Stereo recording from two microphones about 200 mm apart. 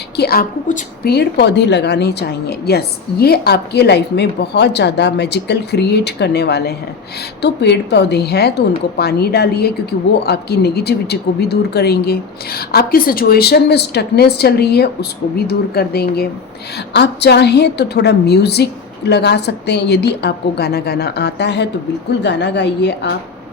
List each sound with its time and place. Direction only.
0.2 s a woman's voice: 50° left (ahead or behind)